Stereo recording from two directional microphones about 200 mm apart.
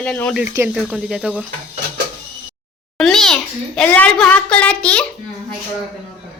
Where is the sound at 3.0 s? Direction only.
Centre (ahead or behind).